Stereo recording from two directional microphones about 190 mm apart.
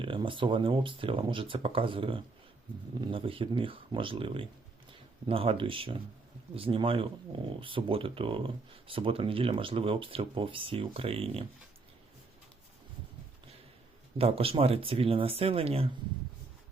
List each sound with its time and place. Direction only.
0.0 s speech: 25° right (ahead or behind)
14.2 s speech: 30° right (ahead or behind)